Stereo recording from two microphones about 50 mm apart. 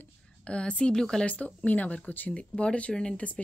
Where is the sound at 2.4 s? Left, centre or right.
Left.